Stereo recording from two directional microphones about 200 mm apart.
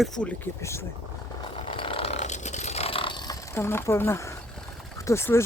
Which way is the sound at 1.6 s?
25° left (ahead or behind).